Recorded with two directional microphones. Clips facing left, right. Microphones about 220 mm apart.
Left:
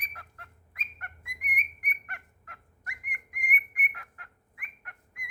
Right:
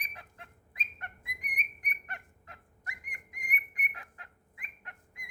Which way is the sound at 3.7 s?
25° right (ahead or behind).